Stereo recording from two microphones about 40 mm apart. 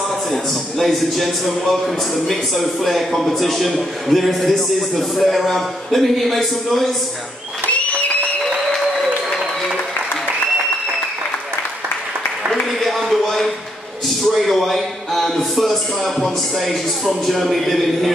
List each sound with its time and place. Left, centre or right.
0.3 s a man's voice: centre
7.7 s applause: left
12.7 s a sound: centre
14.0 s speech: centre